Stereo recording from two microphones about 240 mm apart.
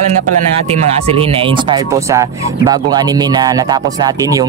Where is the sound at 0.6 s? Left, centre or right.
Right.